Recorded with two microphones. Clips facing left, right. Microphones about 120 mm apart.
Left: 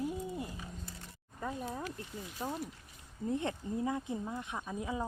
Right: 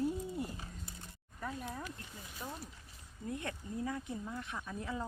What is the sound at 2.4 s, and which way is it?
Speech, 30° left (ahead or behind).